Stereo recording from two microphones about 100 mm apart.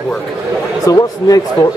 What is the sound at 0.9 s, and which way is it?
Speech, 35° left (ahead or behind).